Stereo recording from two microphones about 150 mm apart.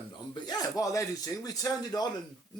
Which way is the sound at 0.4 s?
25° left (ahead or behind).